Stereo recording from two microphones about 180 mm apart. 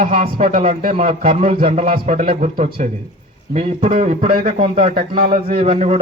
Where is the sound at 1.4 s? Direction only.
50° right (ahead or behind).